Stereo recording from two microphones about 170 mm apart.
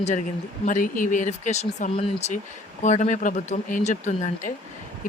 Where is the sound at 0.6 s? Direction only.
50° left (ahead or behind).